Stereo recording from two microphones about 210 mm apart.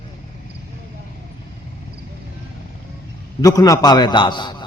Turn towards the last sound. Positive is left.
turn(degrees=20)  # may be behind; listen again after turning